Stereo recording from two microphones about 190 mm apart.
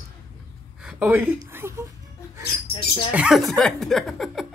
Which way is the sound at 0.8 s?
10° right (ahead or behind).